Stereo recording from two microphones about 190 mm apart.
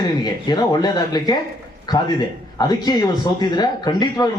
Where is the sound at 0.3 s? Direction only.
20° left (ahead or behind).